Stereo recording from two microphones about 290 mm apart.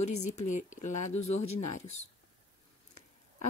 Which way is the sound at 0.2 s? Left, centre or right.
Left.